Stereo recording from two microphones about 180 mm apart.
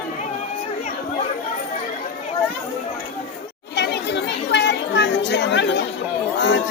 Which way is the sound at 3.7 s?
70° left (ahead or behind).